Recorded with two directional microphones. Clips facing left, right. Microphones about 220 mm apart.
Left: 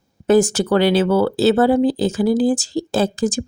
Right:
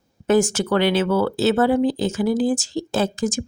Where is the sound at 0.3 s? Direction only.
35° left (ahead or behind).